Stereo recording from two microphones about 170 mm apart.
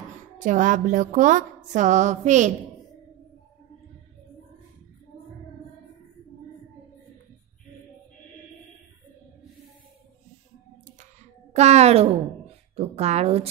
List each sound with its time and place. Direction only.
0.4 s music: 50° right (ahead or behind)
11.5 s speech: 40° right (ahead or behind)